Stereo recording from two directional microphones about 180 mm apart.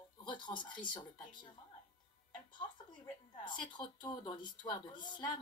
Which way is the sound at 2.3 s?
25° left (ahead or behind).